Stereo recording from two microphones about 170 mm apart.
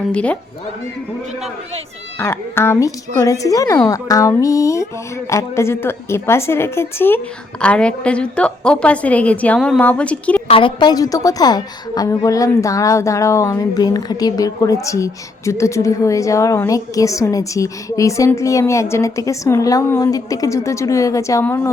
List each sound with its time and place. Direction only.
0.1 s speech: 5° left (ahead or behind)
2.1 s speech: 15° left (ahead or behind)
10.5 s a woman's voice: 30° left (ahead or behind)